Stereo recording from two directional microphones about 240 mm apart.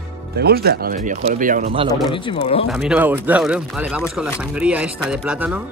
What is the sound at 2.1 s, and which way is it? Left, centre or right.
Speech, left.